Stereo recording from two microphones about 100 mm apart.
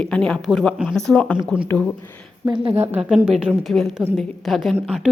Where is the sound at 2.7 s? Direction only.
20° right (ahead or behind).